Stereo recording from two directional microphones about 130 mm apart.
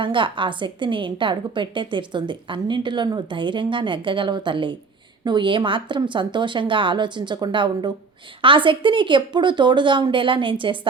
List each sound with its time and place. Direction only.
0.0 s a woman's voice: 40° right (ahead or behind)